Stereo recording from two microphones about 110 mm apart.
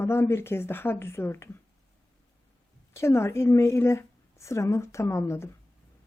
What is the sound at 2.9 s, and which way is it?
Speech, 25° left (ahead or behind).